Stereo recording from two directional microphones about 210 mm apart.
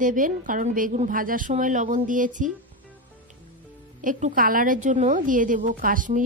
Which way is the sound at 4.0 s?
40° right (ahead or behind).